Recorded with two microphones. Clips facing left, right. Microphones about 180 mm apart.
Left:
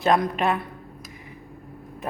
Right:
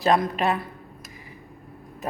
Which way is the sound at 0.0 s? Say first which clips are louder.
Even; centre (ahead or behind).